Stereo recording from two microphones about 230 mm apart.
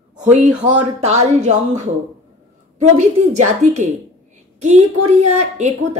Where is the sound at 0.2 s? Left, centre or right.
Right.